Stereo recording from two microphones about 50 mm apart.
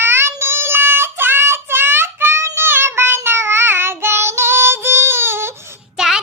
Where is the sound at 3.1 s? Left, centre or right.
Right.